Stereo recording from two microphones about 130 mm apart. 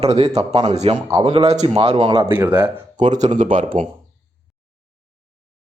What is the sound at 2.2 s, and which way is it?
Speech, 15° right (ahead or behind).